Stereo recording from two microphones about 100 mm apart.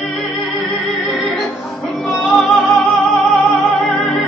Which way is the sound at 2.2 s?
5° left (ahead or behind).